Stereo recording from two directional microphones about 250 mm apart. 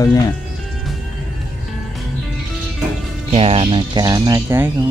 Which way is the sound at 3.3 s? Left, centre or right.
Right.